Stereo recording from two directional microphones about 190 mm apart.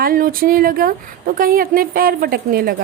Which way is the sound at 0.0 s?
45° right (ahead or behind).